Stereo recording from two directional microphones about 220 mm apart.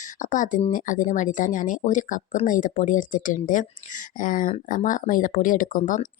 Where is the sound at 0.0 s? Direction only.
35° left (ahead or behind).